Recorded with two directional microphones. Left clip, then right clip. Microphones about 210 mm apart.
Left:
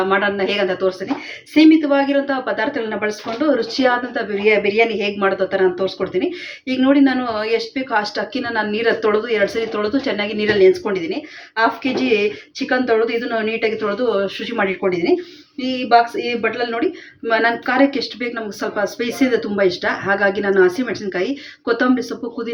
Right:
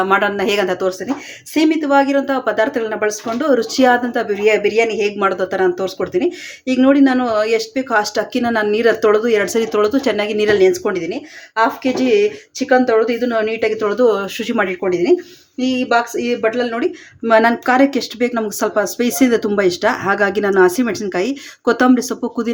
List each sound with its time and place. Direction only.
0.1 s speech: 50° right (ahead or behind)